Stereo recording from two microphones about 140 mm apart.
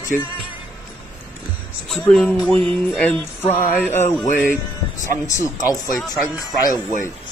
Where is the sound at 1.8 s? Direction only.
5° left (ahead or behind).